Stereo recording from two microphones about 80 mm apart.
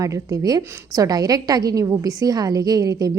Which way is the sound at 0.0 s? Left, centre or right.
Right.